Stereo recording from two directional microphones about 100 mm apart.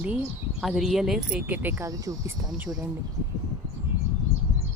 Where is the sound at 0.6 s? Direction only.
5° right (ahead or behind).